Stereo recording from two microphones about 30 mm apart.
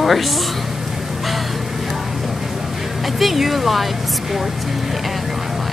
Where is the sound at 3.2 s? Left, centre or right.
Centre.